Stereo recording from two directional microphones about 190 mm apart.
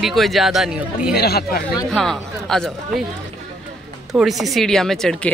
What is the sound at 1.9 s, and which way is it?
Speech, centre (ahead or behind).